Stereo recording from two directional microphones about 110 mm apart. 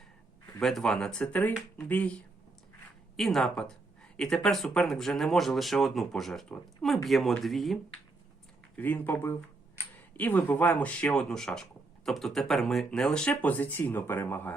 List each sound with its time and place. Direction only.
0.6 s speech: 5° left (ahead or behind)
3.2 s speech: centre (ahead or behind)
8.7 s speech: 15° left (ahead or behind)